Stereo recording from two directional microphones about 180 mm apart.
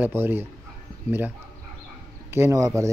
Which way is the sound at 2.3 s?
15° right (ahead or behind).